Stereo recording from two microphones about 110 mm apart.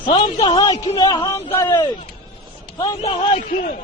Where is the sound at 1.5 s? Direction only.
25° left (ahead or behind).